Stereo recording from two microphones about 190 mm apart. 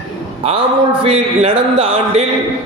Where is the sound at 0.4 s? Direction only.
30° right (ahead or behind).